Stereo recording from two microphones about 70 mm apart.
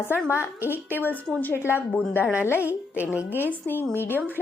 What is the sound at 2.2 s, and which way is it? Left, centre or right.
Speech, right.